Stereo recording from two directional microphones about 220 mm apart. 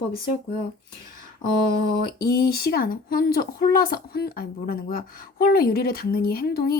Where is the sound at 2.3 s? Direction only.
45° left (ahead or behind).